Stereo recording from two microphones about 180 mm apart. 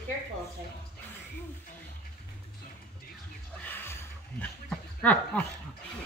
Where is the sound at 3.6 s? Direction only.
10° left (ahead or behind).